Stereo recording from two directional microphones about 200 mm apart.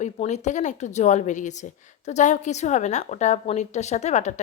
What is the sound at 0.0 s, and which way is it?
A woman's voice, 35° left (ahead or behind).